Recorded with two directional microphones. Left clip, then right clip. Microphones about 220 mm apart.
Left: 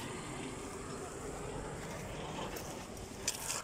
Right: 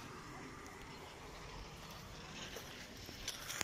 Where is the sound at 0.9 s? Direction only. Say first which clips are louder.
Left 8 dB; 55° left (ahead or behind).